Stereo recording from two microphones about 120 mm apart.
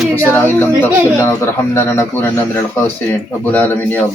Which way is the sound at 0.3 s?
20° left (ahead or behind).